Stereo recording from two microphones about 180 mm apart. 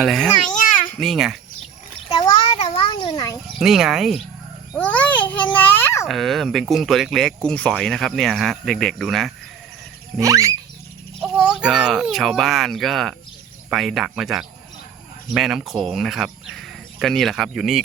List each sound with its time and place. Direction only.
0.0 s speech: centre (ahead or behind)
0.4 s babbling: 45° left (ahead or behind)
0.9 s speech: centre (ahead or behind)
2.0 s a sound: 25° left (ahead or behind)
3.6 s a child's voice: centre (ahead or behind)
5.5 s a sound: 10° left (ahead or behind)
6.1 s speech: centre (ahead or behind)
10.2 s rodents: 15° right (ahead or behind)
11.2 s speech: 5° right (ahead or behind)